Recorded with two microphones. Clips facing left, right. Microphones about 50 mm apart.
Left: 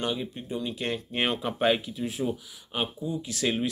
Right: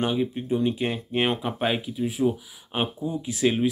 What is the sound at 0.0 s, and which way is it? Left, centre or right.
Speech, centre.